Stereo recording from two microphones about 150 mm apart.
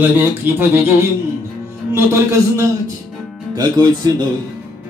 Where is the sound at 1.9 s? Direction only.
15° right (ahead or behind).